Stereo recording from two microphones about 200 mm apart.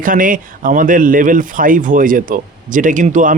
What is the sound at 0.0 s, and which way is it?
Speech, 45° right (ahead or behind).